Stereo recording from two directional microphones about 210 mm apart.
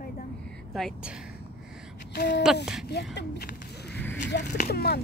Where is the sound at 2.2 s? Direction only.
55° left (ahead or behind).